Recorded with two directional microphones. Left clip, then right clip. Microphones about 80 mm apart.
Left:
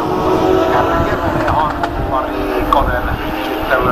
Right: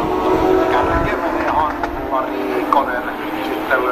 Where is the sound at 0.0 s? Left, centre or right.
Centre.